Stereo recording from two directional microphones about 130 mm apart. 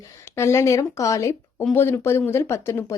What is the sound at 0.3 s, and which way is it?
Speech, 20° left (ahead or behind).